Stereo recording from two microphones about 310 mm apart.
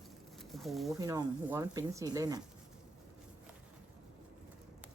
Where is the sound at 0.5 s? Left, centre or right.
Centre.